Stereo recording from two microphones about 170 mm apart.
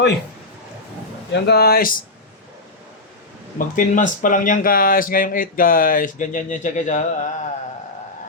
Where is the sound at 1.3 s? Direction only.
80° left; by 1.9 s 65° left (ahead or behind).